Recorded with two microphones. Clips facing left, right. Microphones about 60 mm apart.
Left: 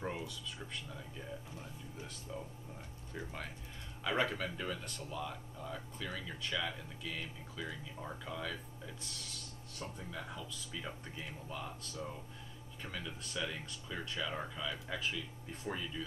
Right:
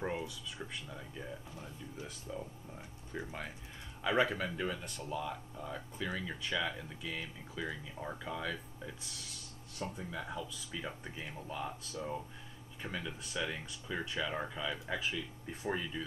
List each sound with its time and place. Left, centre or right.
0.0 s speech: centre
2.3 s speech: centre